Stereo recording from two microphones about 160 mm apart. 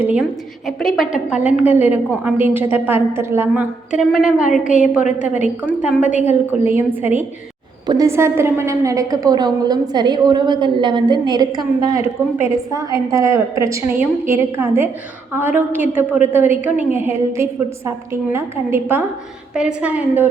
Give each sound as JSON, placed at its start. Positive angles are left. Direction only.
{"t": 0.8, "sound": "a woman's voice", "side_deg": 0}